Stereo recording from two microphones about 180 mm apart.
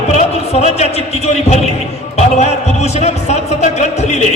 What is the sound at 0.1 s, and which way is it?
A man's voice, 35° left (ahead or behind).